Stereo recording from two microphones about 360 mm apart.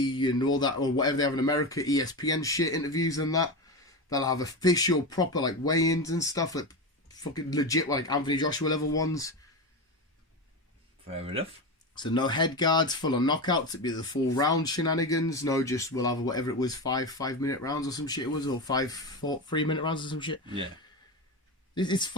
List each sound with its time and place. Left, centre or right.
0.0 s speech: centre
11.0 s speech: centre
11.9 s speech: centre
21.8 s speech: centre